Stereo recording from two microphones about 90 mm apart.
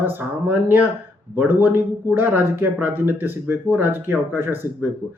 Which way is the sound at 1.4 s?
20° right (ahead or behind).